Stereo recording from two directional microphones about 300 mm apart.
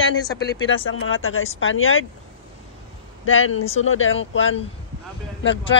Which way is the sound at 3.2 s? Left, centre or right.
Left.